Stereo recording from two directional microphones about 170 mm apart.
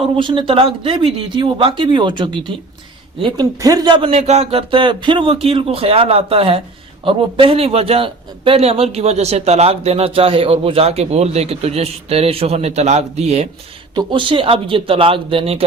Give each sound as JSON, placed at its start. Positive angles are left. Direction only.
{"t": 0.2, "sound": "speech", "side_deg": -30}
{"t": 4.1, "sound": "a man's voice", "side_deg": -40}
{"t": 13.9, "sound": "a man's voice", "side_deg": -30}